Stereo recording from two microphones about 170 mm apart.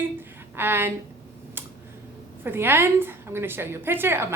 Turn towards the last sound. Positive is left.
turn(degrees=-15)  # may be behind; listen again after turning